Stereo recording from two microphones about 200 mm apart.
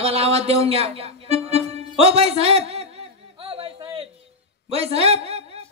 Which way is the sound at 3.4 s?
30° right (ahead or behind).